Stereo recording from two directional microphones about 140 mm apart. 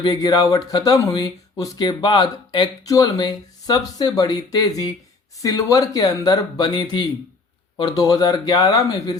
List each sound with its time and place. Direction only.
0.0 s speech: 30° left (ahead or behind)